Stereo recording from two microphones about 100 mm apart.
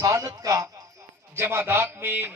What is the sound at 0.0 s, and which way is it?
A man's voice, 30° right (ahead or behind).